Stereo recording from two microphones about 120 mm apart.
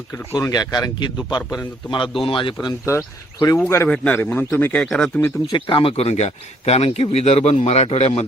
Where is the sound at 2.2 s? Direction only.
45° left (ahead or behind).